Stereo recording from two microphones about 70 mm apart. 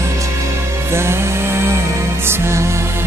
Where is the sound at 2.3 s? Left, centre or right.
Right.